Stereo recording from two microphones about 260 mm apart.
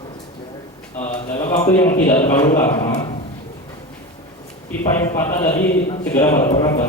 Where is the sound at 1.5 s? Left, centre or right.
Centre.